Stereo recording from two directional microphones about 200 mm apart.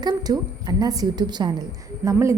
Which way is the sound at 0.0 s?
20° right (ahead or behind).